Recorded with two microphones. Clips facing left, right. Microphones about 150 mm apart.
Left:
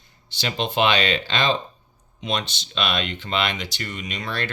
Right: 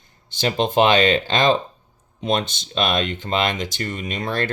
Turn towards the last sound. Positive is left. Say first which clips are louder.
# right 5 dB
turn(degrees=-50)  # may be behind; listen again after turning